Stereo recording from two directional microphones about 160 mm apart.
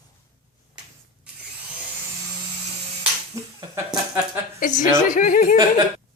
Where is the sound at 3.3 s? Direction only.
25° right (ahead or behind).